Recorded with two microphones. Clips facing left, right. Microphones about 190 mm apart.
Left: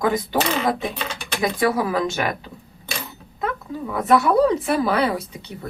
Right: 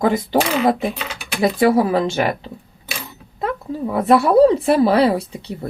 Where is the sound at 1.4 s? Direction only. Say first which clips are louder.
Right 6 dB; 25° right (ahead or behind).